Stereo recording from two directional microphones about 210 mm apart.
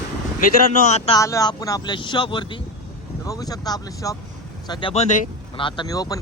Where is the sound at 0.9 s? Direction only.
30° left (ahead or behind).